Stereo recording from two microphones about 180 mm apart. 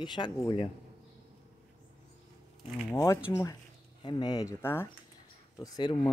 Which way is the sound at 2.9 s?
15° left (ahead or behind).